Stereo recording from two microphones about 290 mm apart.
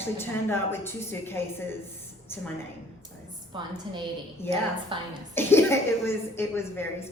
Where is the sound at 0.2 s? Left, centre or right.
Centre.